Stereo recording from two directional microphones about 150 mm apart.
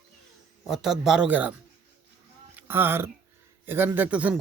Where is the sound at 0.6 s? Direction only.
Centre (ahead or behind).